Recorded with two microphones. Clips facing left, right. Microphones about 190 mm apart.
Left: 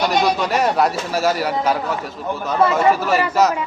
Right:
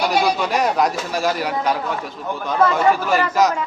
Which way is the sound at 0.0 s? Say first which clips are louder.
Left 1 dB; 5° right (ahead or behind).